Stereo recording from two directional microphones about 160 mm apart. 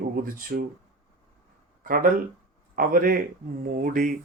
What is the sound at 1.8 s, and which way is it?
Speech, 60° right (ahead or behind).